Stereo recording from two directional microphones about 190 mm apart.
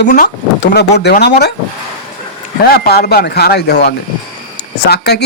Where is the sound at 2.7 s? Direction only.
55° left (ahead or behind).